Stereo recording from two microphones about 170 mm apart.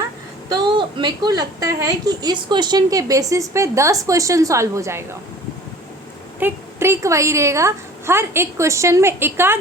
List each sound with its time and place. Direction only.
0.4 s a woman's voice: 25° right (ahead or behind)
6.4 s a woman's voice: 15° right (ahead or behind)